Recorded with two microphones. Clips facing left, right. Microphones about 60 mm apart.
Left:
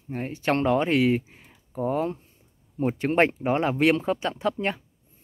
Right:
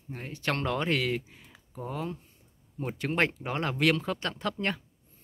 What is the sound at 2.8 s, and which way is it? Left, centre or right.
Speech, left.